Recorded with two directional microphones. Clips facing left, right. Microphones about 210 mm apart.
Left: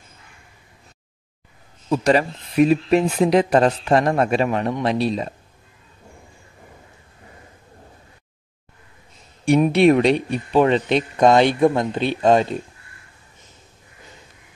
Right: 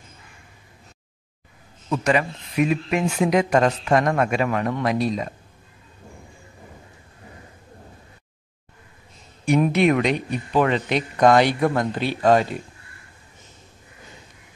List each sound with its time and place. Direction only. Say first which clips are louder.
1.9 s speech: left 4 dB; 35° left (ahead or behind)
9.4 s a man's voice: left 3 dB; 30° left (ahead or behind)